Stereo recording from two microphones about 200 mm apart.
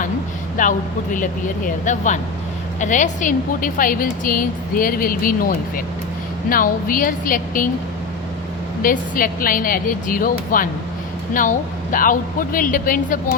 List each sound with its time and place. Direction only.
0.6 s a woman's voice: 40° left (ahead or behind)
8.8 s a woman's voice: 45° left (ahead or behind)